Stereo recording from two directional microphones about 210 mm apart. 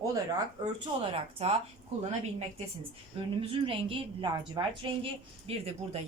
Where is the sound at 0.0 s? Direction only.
15° right (ahead or behind).